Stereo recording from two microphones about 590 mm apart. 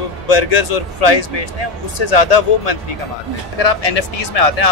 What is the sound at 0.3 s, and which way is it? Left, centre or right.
Speech, left.